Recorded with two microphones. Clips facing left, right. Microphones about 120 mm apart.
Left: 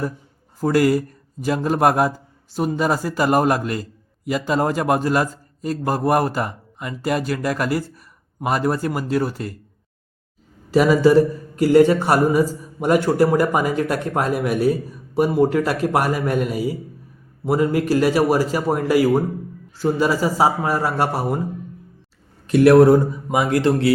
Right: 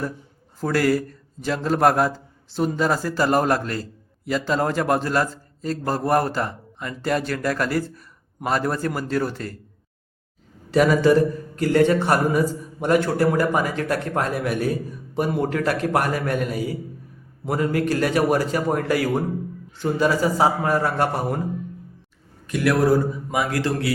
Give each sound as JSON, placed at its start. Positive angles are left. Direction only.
{"t": 0.6, "sound": "a man's voice", "side_deg": 15}
{"t": 10.7, "sound": "a man's voice", "side_deg": 5}
{"t": 22.4, "sound": "speech", "side_deg": 30}